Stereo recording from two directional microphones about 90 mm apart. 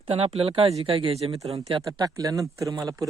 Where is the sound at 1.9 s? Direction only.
45° right (ahead or behind).